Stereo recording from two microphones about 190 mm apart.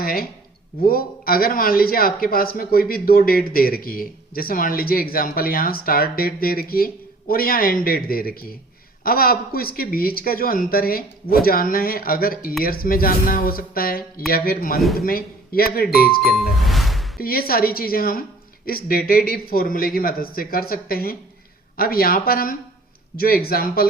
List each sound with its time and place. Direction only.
0.0 s a man's voice: 50° left (ahead or behind)
16.3 s ding: centre (ahead or behind)
17.2 s a man's voice: 50° left (ahead or behind)